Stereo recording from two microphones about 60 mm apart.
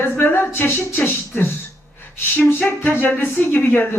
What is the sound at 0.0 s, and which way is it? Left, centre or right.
Speech, left.